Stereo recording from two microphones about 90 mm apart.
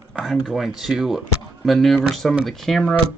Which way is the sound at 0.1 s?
Centre (ahead or behind).